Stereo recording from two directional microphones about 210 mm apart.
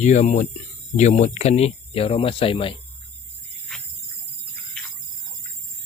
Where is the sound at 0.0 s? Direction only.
35° left (ahead or behind).